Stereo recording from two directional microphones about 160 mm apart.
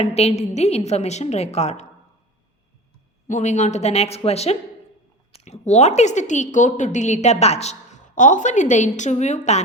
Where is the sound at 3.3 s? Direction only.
45° left (ahead or behind).